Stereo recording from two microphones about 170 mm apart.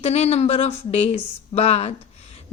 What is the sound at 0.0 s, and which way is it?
A woman's voice, 40° left (ahead or behind).